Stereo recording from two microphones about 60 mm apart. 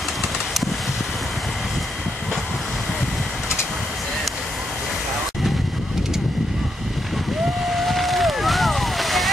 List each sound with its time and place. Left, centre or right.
7.7 s vehicle: centre